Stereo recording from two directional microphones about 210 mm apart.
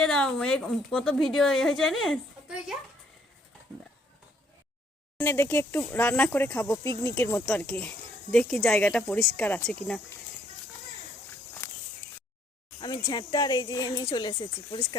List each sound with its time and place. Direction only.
0.0 s speech: 5° left (ahead or behind)
5.1 s speech: 10° left (ahead or behind)
13.1 s speech: 20° left (ahead or behind)